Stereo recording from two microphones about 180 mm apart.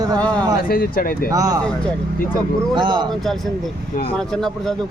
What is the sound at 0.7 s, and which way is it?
Speech, 55° left (ahead or behind).